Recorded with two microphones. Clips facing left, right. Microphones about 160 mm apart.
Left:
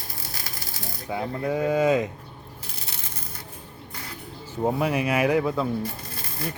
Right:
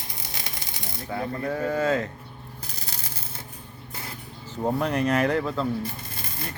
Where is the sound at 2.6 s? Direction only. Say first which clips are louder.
Right 2 dB; 35° right (ahead or behind).